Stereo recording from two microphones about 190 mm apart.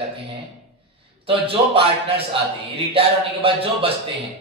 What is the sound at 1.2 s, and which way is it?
Speech, 30° right (ahead or behind).